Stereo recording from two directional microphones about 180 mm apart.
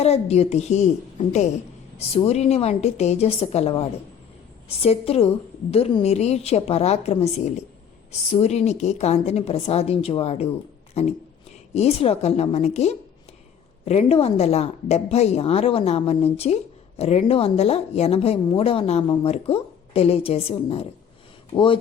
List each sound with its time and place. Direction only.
0.0 s a woman's voice: 35° left (ahead or behind)